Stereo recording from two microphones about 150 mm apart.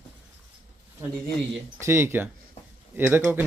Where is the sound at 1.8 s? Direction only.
15° right (ahead or behind).